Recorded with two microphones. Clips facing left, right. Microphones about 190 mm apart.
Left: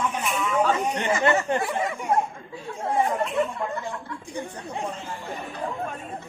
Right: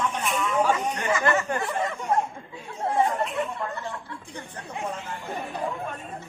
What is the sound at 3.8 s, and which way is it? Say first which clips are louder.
Speech: left 2 dB; 10° left (ahead or behind).